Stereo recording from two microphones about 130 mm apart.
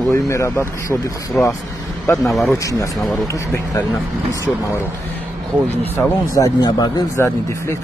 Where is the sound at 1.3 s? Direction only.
10° left (ahead or behind).